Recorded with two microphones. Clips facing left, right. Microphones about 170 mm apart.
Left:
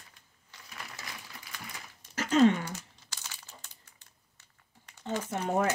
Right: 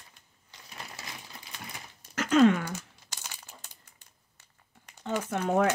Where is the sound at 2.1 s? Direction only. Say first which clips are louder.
Right 2 dB; 60° right (ahead or behind).